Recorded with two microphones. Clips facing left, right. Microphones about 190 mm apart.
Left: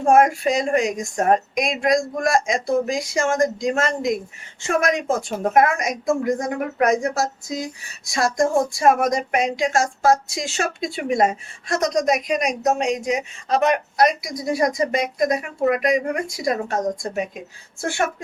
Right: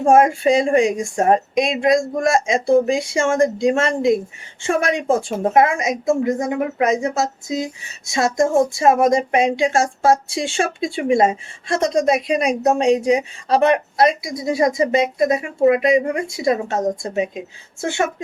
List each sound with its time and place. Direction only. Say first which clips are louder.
0.0 s speech: right 2 dB; 25° right (ahead or behind)